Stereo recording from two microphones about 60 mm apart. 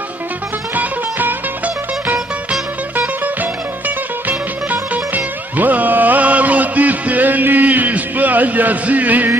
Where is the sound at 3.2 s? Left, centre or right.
Right.